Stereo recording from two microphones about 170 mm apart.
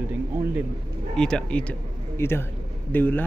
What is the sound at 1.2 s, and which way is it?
Speech, 5° left (ahead or behind).